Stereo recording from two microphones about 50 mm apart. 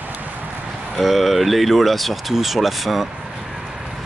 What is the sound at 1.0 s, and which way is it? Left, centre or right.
Speech, centre.